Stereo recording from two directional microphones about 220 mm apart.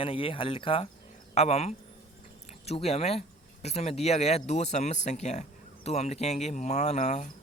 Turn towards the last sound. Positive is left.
turn(degrees=30)  # may be behind; listen again after turning